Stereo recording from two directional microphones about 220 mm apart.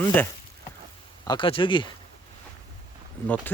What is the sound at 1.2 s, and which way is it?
Speech, 20° left (ahead or behind).